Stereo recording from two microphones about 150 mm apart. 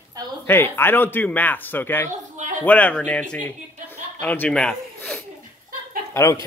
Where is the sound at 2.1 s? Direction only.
55° right (ahead or behind).